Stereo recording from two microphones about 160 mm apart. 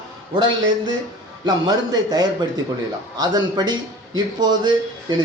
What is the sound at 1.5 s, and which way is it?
A man's voice, 25° right (ahead or behind).